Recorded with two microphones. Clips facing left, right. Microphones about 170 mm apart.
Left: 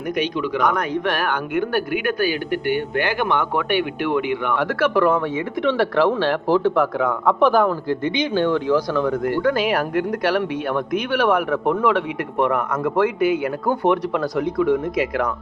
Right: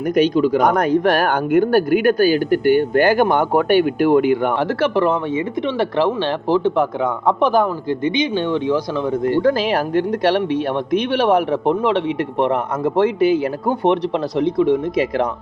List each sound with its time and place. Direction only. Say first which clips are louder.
0.1 s speech: right 8 dB; 35° right (ahead or behind)
4.8 s speech: left 1 dB; 25° right (ahead or behind)